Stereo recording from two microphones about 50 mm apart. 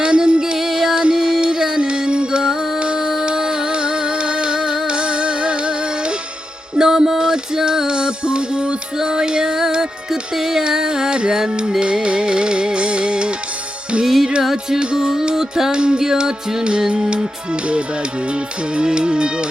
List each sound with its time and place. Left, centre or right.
0.0 s music: centre
6.7 s music: centre
14.0 s music: centre
18.8 s music: centre